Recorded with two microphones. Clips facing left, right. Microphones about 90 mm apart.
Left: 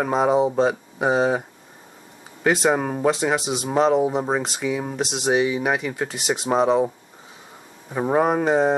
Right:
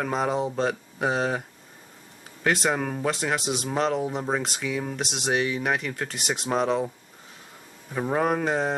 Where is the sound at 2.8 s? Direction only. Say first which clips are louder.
Left 4 dB; 15° left (ahead or behind).